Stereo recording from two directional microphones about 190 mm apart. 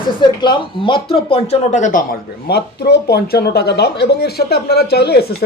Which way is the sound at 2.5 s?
60° left (ahead or behind).